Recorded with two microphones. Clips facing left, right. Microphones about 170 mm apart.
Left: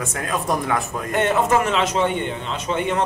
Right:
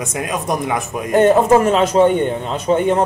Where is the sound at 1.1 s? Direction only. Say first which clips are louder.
Right 8 dB; 40° right (ahead or behind).